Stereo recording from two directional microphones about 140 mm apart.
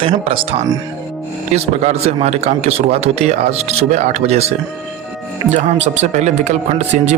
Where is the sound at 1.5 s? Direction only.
50° right (ahead or behind).